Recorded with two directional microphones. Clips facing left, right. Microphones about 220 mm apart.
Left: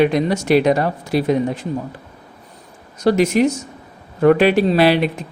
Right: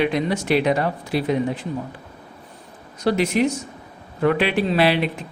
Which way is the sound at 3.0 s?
45° left (ahead or behind).